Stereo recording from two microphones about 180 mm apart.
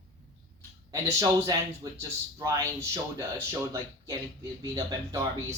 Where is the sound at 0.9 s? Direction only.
15° right (ahead or behind).